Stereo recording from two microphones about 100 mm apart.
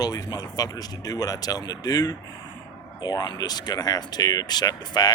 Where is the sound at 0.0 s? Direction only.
40° left (ahead or behind).